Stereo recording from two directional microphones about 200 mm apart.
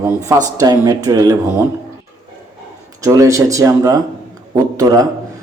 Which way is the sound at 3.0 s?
15° right (ahead or behind).